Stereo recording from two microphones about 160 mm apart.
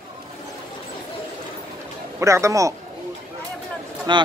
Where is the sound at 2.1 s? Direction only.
20° right (ahead or behind).